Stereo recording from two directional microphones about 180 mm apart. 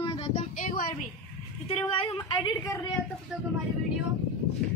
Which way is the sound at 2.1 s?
20° left (ahead or behind).